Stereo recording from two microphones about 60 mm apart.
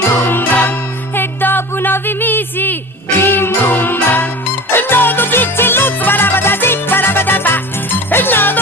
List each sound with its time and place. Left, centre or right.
0.1 s music: left